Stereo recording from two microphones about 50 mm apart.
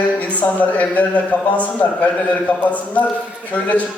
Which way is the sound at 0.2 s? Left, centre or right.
Left.